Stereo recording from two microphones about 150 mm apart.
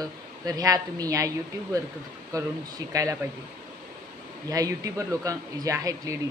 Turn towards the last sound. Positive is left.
turn(degrees=-20)  # may be behind; listen again after turning